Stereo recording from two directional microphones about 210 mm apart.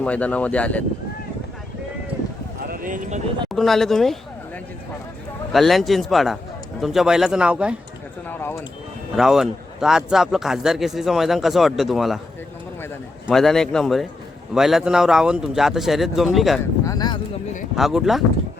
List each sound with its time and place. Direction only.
0.0 s speech: 5° left (ahead or behind)
2.6 s a sound: 40° right (ahead or behind)
3.5 s speech: centre (ahead or behind)
5.5 s speech: centre (ahead or behind)
8.3 s a sound: 10° left (ahead or behind)
9.1 s speech: centre (ahead or behind)
13.2 s speech: centre (ahead or behind)
16.8 s a sound: 15° left (ahead or behind)
17.7 s speech: centre (ahead or behind)